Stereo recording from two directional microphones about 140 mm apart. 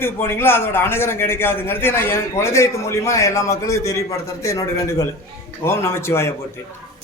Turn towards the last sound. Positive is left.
turn(degrees=20)  # may be behind; listen again after turning